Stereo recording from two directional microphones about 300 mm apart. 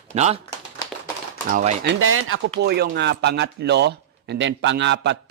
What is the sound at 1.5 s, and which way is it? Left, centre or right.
Speech, right.